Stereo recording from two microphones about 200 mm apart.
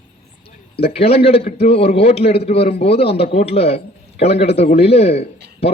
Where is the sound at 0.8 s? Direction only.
30° left (ahead or behind).